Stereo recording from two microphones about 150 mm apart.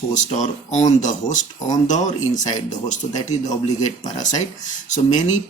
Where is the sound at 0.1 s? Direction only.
55° left (ahead or behind).